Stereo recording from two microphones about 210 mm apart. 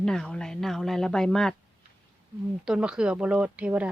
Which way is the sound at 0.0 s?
5° left (ahead or behind).